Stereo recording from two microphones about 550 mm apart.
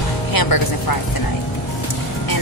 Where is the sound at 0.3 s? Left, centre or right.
Left.